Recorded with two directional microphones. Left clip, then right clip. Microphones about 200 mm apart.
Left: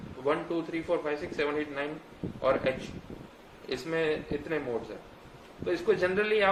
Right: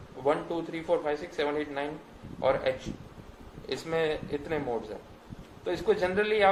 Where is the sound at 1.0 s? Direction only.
20° right (ahead or behind).